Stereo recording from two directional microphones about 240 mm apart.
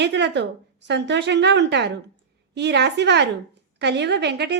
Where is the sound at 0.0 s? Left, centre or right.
Right.